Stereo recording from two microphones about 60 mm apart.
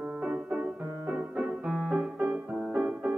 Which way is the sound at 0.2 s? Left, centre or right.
Centre.